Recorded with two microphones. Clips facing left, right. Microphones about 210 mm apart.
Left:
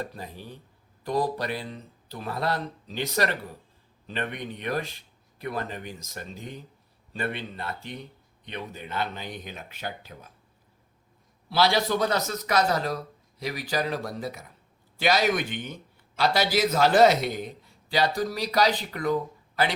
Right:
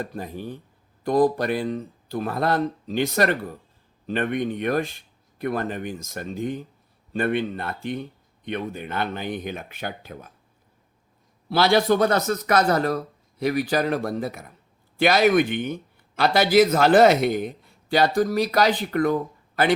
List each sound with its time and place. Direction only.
0.0 s speech: 50° right (ahead or behind)
11.4 s speech: 55° right (ahead or behind)